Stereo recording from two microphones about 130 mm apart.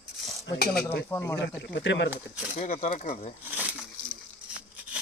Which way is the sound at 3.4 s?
10° right (ahead or behind).